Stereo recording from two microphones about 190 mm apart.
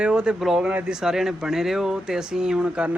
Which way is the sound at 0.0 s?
5° right (ahead or behind).